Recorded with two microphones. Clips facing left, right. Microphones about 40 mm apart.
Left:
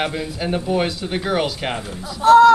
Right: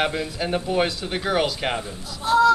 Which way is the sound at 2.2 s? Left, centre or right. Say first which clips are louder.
Left 8 dB; left.